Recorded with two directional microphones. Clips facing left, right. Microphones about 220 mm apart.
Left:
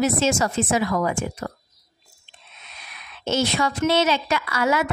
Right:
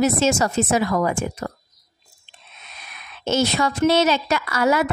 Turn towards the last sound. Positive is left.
turn(degrees=-40)  # may be behind; listen again after turning